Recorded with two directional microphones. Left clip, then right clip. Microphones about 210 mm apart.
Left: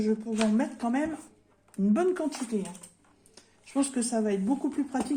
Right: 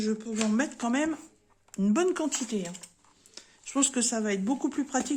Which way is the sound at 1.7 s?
45° right (ahead or behind).